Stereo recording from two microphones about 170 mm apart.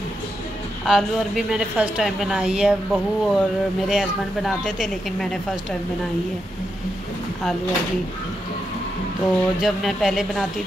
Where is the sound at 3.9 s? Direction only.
5° right (ahead or behind).